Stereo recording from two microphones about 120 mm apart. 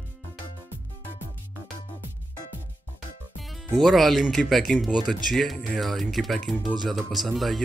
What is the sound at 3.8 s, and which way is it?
Speech, centre (ahead or behind).